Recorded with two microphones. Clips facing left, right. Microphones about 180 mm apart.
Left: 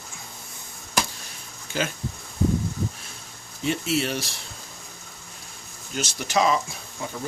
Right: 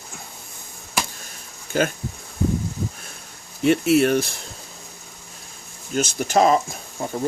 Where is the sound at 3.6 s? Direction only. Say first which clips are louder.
Right 9 dB; 60° right (ahead or behind).